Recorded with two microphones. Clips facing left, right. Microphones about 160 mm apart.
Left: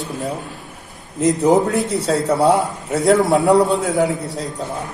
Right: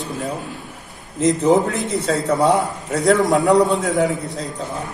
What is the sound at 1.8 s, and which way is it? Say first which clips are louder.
Speech: left 2 dB; 35° left (ahead or behind).